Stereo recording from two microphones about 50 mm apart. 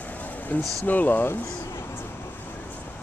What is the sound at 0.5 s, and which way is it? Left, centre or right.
Speech, left.